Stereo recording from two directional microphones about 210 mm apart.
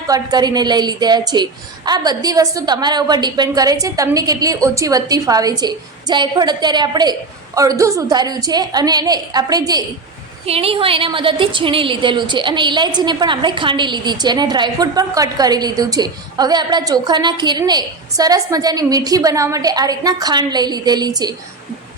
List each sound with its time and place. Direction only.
0.1 s a woman's voice: 20° right (ahead or behind)
10.4 s a woman's voice: 30° right (ahead or behind)